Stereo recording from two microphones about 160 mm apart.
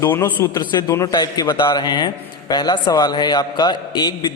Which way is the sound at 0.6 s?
25° left (ahead or behind).